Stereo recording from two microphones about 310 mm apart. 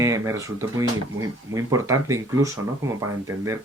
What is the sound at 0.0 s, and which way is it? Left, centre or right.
Speech, centre.